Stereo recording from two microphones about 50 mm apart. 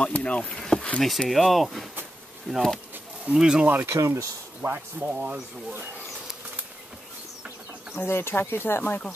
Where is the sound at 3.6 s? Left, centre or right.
Right.